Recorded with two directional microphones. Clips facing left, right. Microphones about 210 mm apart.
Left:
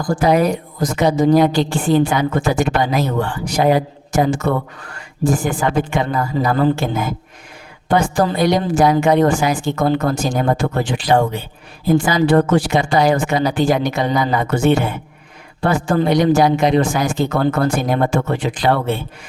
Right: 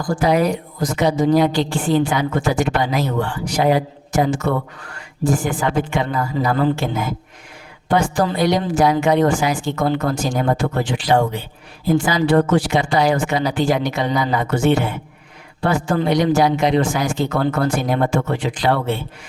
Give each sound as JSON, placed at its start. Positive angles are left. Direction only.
{"t": 0.2, "sound": "a woman's voice", "side_deg": 45}